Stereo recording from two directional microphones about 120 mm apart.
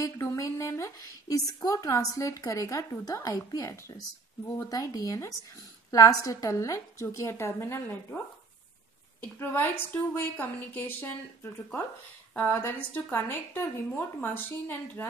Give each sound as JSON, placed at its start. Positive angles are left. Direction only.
{"t": 0.0, "sound": "speech", "side_deg": 25}
{"t": 9.2, "sound": "a woman's voice", "side_deg": 15}
{"t": 12.4, "sound": "a woman's voice", "side_deg": 15}